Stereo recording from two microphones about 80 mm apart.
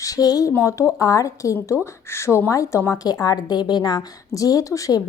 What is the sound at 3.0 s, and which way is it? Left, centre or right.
A woman's voice, left.